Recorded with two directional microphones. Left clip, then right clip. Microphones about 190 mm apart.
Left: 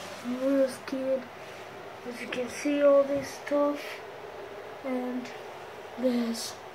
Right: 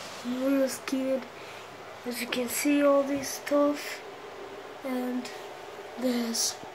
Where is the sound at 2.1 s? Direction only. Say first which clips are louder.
Right 3 dB; 10° right (ahead or behind).